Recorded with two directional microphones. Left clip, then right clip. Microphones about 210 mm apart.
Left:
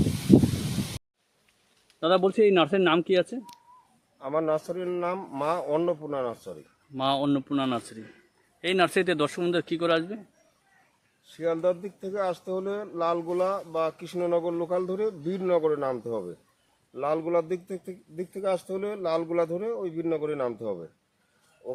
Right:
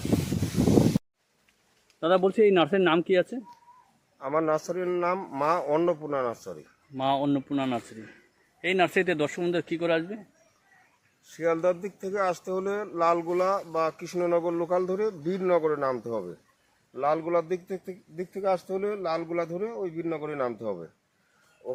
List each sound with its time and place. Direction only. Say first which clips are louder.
2.0 s a man's voice: even; 10° left (ahead or behind)
4.2 s speech: right 1 dB; 5° right (ahead or behind)
6.9 s a man's voice: even; 10° left (ahead or behind)
11.3 s speech: right 1 dB; 15° right (ahead or behind); by 16.3 s 15° left (ahead or behind)
16.9 s a man's voice: right 1 dB; 30° left (ahead or behind)
21.6 s speech: right 1 dB; 5° right (ahead or behind)